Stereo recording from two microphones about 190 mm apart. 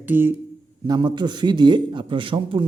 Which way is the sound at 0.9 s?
25° right (ahead or behind).